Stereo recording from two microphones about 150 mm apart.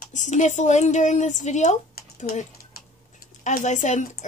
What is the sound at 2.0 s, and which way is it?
Typing, 75° left (ahead or behind).